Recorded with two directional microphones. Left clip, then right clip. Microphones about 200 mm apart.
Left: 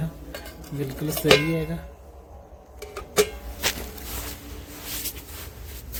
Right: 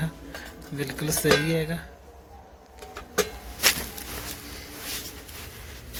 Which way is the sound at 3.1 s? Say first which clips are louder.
Left 5 dB; 20° left (ahead or behind).